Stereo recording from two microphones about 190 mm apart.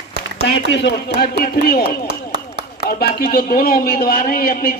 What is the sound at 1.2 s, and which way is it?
Speech, 55° left (ahead or behind).